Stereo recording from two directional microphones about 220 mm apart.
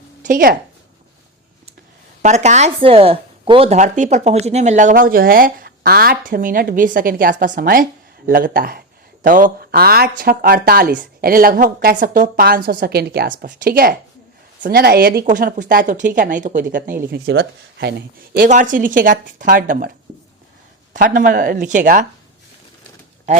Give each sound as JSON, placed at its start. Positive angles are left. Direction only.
{"t": 0.2, "sound": "speech", "side_deg": -40}
{"t": 2.2, "sound": "speech", "side_deg": -30}
{"t": 17.1, "sound": "speech", "side_deg": -50}
{"t": 18.3, "sound": "speech", "side_deg": -35}
{"t": 20.9, "sound": "speech", "side_deg": -40}
{"t": 23.3, "sound": "speech", "side_deg": -30}